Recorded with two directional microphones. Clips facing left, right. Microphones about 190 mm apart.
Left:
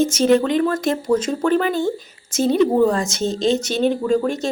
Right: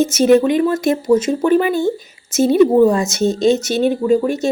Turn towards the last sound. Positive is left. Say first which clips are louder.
# right 4 dB
turn(degrees=-10)  # may be behind; listen again after turning